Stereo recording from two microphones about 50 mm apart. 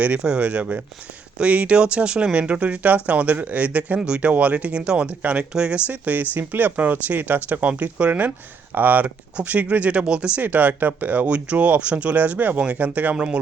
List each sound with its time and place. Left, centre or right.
0.2 s speech: centre
5.9 s speech: right
7.7 s speech: right
10.4 s speech: right
11.3 s speech: right
13.1 s speech: centre